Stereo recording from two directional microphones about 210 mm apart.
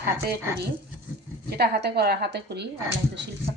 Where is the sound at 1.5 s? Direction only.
50° right (ahead or behind).